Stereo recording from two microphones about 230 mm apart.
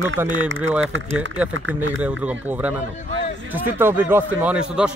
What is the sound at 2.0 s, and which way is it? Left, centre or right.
Speech, centre.